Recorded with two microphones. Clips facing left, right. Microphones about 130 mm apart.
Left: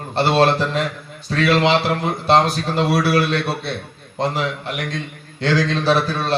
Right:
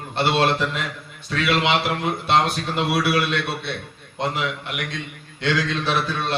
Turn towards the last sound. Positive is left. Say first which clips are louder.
# left 5 dB
turn(degrees=35)  # may be behind; listen again after turning